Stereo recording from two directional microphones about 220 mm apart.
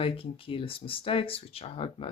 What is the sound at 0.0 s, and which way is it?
Speech, 25° left (ahead or behind).